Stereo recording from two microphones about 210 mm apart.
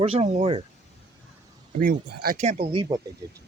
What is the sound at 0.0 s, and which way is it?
Speech, 25° right (ahead or behind).